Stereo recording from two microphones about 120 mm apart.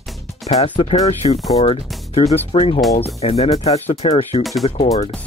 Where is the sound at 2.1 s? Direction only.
60° left (ahead or behind).